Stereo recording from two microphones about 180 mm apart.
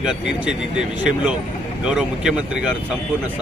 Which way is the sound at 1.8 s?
5° right (ahead or behind).